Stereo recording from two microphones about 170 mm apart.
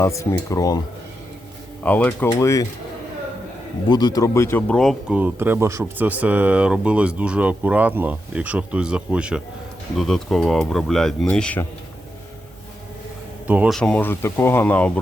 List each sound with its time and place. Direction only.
0.0 s speech: 15° left (ahead or behind)
1.8 s speech: 10° left (ahead or behind)
3.8 s speech: 25° left (ahead or behind); by 11.6 s 5° left (ahead or behind)
13.5 s speech: 10° right (ahead or behind)
13.7 s speech: 5° left (ahead or behind)